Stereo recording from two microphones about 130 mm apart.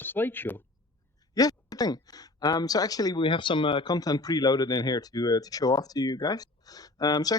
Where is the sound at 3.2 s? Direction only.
40° left (ahead or behind).